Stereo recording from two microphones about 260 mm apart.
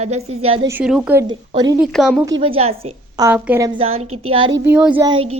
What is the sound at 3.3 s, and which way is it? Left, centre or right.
A woman's voice, centre.